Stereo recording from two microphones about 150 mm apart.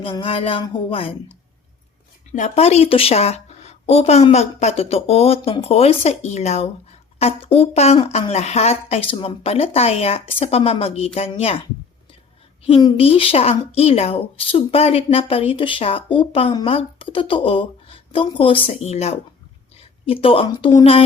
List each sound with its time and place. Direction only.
0.0 s speech: 35° left (ahead or behind)
2.3 s speech: 50° left (ahead or behind)
12.6 s speech: 40° left (ahead or behind)
20.2 s speech: 35° left (ahead or behind)